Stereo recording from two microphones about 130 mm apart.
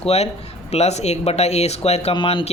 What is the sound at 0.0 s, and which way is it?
Speech, 55° left (ahead or behind).